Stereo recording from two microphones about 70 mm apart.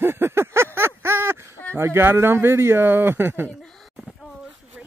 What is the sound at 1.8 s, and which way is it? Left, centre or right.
Speech, right.